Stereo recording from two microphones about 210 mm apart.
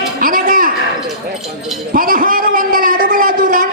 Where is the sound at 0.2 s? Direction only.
40° right (ahead or behind).